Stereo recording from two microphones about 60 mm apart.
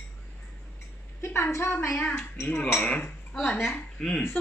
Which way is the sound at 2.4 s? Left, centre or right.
Left.